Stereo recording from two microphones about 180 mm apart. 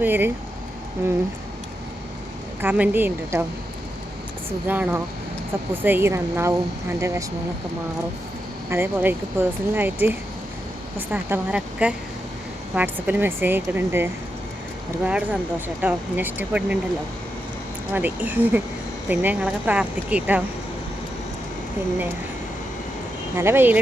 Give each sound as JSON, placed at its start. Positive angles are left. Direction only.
{"t": 0.0, "sound": "speech", "side_deg": -10}
{"t": 2.6, "sound": "speech", "side_deg": -10}
{"t": 4.6, "sound": "speech", "side_deg": -10}
{"t": 8.7, "sound": "speech", "side_deg": -10}
{"t": 17.9, "sound": "speech", "side_deg": -10}
{"t": 23.4, "sound": "speech", "side_deg": -10}